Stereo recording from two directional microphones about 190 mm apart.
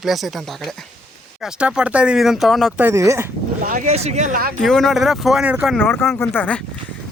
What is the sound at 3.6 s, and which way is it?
Speech, 45° right (ahead or behind).